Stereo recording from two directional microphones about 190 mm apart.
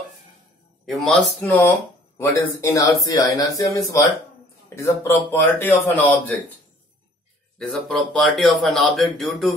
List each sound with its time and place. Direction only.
0.8 s speech: centre (ahead or behind)
7.5 s speech: centre (ahead or behind)